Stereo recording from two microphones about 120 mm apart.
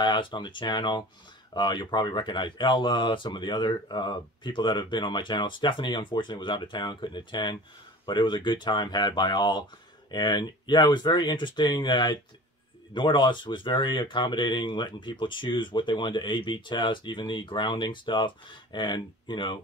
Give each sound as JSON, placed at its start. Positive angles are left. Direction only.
{"t": 0.0, "sound": "speech", "side_deg": 40}